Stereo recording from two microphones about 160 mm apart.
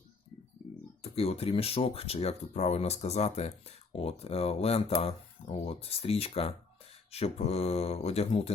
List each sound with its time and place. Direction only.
1.0 s speech: 40° left (ahead or behind)